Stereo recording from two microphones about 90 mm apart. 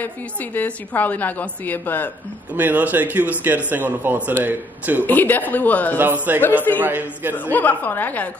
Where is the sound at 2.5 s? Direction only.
20° right (ahead or behind).